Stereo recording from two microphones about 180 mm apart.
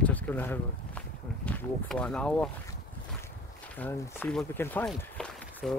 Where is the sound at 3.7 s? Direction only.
10° left (ahead or behind).